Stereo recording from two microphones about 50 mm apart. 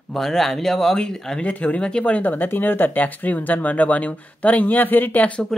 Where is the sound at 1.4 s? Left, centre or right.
Left.